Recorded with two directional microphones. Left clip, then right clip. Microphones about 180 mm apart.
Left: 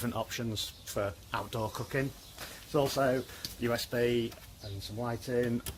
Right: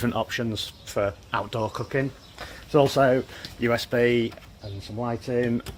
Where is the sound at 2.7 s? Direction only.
35° right (ahead or behind).